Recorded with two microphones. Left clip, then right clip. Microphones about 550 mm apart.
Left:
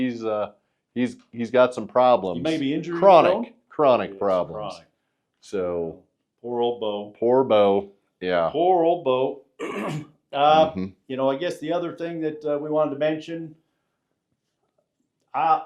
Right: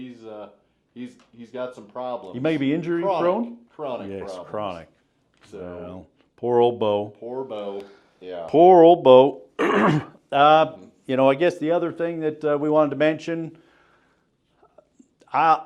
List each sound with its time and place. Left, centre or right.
0.0 s speech: left
2.4 s speech: right
3.0 s speech: left
4.1 s speech: right
6.4 s speech: right
7.2 s speech: left
8.5 s speech: right
15.2 s a sound: right